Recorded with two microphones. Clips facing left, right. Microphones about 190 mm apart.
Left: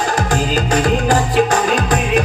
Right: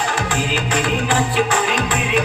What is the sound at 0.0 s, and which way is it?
Music, 40° left (ahead or behind).